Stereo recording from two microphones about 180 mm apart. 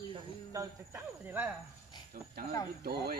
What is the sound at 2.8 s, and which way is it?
Speech, 60° right (ahead or behind).